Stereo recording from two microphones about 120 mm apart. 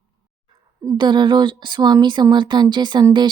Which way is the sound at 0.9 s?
40° right (ahead or behind).